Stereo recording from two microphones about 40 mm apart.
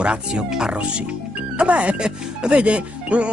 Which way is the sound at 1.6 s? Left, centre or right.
Right.